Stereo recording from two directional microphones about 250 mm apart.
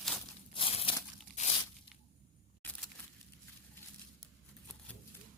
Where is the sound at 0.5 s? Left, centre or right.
Left.